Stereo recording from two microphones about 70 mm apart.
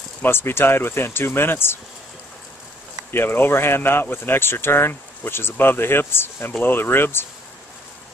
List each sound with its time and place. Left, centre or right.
0.2 s speech: left
3.1 s speech: left